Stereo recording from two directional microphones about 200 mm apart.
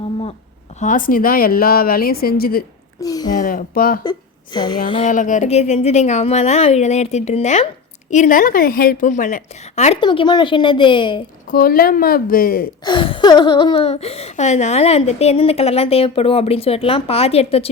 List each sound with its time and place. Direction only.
0.8 s speech: 40° left (ahead or behind)
3.0 s speech: 20° left (ahead or behind)
3.3 s speech: 45° left (ahead or behind)
4.5 s speech: 20° left (ahead or behind)
5.0 s a woman's voice: 40° left (ahead or behind); by 11.2 s 25° left (ahead or behind)
11.4 s speech: 45° left (ahead or behind)
12.8 s speech: 25° left (ahead or behind)